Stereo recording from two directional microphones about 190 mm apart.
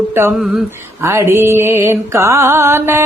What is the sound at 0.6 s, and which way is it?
Mantra, 15° right (ahead or behind).